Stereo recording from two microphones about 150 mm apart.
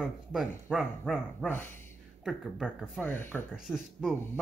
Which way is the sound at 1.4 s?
15° left (ahead or behind).